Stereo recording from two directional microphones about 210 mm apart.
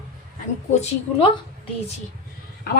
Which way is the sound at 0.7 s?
35° left (ahead or behind).